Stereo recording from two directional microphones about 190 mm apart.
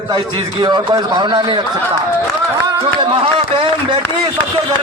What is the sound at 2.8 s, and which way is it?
A man's voice, 30° right (ahead or behind).